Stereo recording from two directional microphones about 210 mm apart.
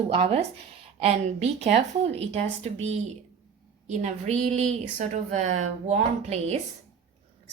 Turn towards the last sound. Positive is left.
turn(degrees=-30)  # may be behind; listen again after turning